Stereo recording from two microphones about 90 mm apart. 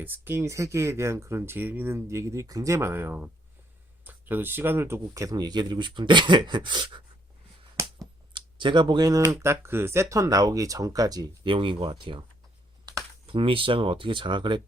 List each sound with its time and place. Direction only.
0.0 s speech: 25° right (ahead or behind); by 7.0 s 60° right (ahead or behind)
7.8 s finger snapping: 30° right (ahead or behind)
8.3 s a sound: 65° right (ahead or behind)
9.0 s speech: 40° right (ahead or behind)
11.4 s speech: 70° right (ahead or behind)
13.2 s speech: 80° right; by 14.6 s 60° right (ahead or behind)